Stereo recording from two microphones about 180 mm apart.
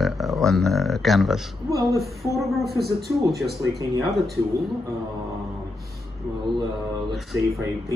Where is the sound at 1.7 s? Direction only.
20° right (ahead or behind).